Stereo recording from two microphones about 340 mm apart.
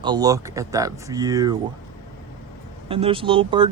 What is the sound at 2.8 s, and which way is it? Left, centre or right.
Speech, centre.